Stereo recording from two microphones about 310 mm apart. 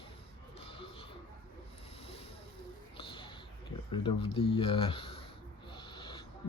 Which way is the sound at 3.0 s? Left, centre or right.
Centre.